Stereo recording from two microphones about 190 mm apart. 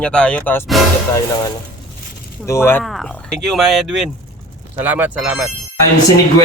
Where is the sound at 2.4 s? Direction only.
15° left (ahead or behind).